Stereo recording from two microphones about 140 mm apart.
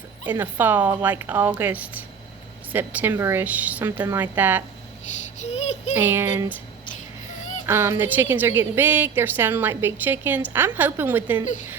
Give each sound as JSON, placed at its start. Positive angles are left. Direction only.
{"t": 0.3, "sound": "a woman's voice", "side_deg": -15}
{"t": 5.4, "sound": "child singing", "side_deg": 50}
{"t": 5.9, "sound": "a woman's voice", "side_deg": -15}
{"t": 7.7, "sound": "a woman's voice", "side_deg": -15}